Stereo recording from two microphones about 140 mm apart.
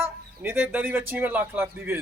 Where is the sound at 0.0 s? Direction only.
15° right (ahead or behind).